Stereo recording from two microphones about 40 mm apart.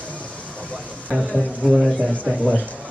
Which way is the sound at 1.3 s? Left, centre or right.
Right.